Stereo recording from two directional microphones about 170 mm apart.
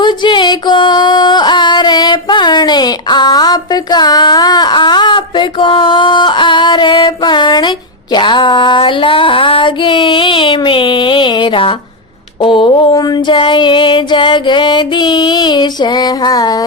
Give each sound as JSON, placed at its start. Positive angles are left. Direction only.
{"t": 0.0, "sound": "music", "side_deg": 25}
{"t": 8.1, "sound": "female singing", "side_deg": 25}
{"t": 12.4, "sound": "a sound", "side_deg": 30}